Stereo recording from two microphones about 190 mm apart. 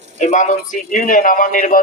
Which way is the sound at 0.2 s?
40° left (ahead or behind).